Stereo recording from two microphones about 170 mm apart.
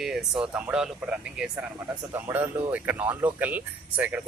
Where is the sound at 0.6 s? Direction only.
10° right (ahead or behind).